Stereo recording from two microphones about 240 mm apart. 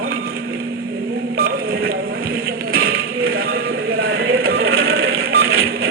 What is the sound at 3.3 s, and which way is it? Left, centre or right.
Music, right.